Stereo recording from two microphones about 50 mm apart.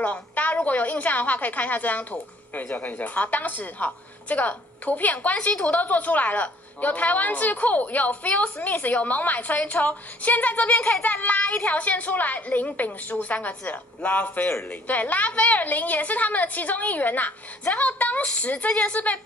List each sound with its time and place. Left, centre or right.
0.0 s a woman's voice: left
18.2 s a woman's voice: left